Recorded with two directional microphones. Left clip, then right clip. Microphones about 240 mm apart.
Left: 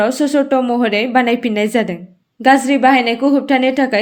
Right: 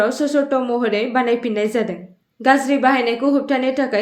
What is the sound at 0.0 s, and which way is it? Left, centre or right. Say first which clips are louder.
A woman's voice: left 3 dB; left.